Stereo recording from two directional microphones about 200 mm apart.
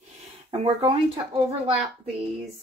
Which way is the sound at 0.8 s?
20° right (ahead or behind).